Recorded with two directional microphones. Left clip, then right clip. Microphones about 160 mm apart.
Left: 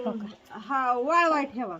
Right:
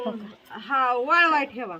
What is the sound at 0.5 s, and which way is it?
Speech, 60° left (ahead or behind).